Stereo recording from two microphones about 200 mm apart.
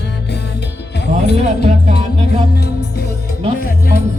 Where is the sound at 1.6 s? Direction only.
35° right (ahead or behind).